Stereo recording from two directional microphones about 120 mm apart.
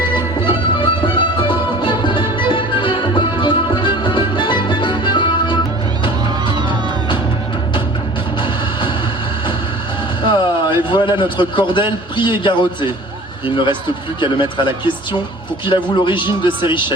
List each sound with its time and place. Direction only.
0.4 s music: 45° left (ahead or behind)
10.2 s a man's voice: 40° left (ahead or behind)
14.2 s speech: 40° left (ahead or behind)